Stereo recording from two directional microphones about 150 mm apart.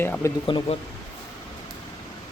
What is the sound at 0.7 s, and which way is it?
Speech, 45° left (ahead or behind).